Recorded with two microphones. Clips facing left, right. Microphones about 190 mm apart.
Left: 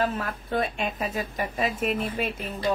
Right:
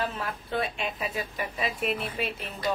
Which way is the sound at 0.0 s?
45° left (ahead or behind).